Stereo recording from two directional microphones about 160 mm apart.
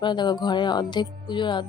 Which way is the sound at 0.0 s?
30° left (ahead or behind).